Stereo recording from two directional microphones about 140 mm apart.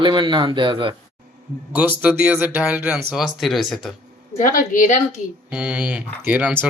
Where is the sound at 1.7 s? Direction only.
10° right (ahead or behind).